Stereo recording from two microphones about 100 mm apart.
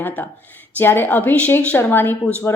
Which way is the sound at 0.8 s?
20° left (ahead or behind).